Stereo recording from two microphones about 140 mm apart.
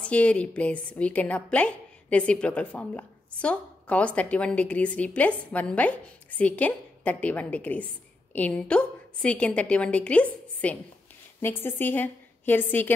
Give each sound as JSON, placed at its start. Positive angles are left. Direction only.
{"t": 0.0, "sound": "a woman's voice", "side_deg": 10}